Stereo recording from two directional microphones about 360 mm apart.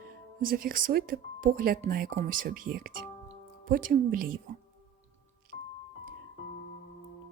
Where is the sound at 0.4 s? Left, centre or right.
Right.